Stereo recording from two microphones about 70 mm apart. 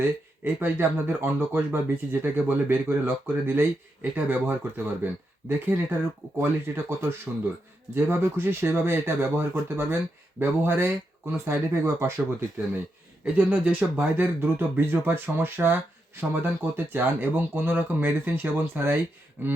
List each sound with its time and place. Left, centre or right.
0.0 s speech: right
13.3 s speech: right